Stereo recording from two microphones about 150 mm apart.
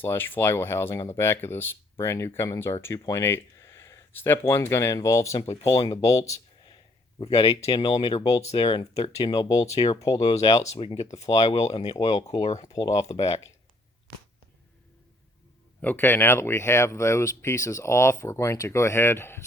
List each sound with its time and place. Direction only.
0.0 s speech: 15° left (ahead or behind)
7.2 s speech: 40° left (ahead or behind)
8.4 s speech: 40° left (ahead or behind)
9.3 s speech: 25° left (ahead or behind)
9.7 s speech: 40° left (ahead or behind)
10.0 s speech: 25° left (ahead or behind)
10.7 s speech: 40° left (ahead or behind)
11.9 s speech: 25° left (ahead or behind)
12.4 s speech: 45° left (ahead or behind)
12.6 s speech: 25° left (ahead or behind)
13.1 s speech: 45° left (ahead or behind)
15.8 s speech: 10° left (ahead or behind)